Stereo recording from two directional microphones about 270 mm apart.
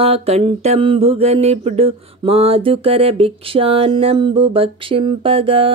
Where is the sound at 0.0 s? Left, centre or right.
Right.